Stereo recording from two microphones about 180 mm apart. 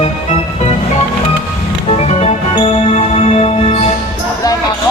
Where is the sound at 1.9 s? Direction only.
35° left (ahead or behind).